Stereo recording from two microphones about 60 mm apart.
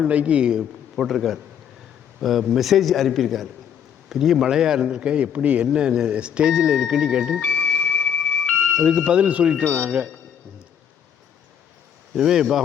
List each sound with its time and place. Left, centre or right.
0.0 s speech: right
0.9 s a man's voice: centre
7.4 s music: left
9.0 s speech: centre
12.1 s a man's voice: centre